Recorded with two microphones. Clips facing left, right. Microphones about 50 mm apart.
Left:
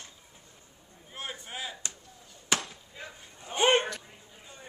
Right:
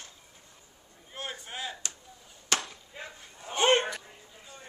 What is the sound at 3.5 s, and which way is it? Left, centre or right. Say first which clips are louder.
Dog: even; centre.